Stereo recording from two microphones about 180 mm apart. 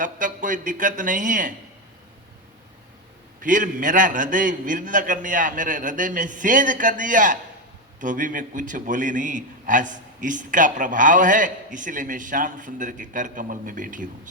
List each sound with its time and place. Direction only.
0.0 s a man's voice: 45° right (ahead or behind)
3.4 s a man's voice: 45° right (ahead or behind)